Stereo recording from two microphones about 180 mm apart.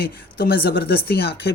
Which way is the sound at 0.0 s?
60° left (ahead or behind).